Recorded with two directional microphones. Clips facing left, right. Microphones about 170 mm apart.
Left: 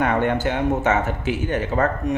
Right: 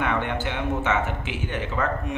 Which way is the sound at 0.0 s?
45° left (ahead or behind).